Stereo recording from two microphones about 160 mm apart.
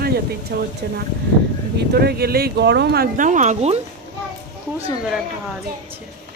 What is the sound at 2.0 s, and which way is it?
Speech, 80° right.